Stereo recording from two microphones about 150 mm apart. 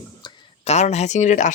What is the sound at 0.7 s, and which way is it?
Speech, 50° left (ahead or behind).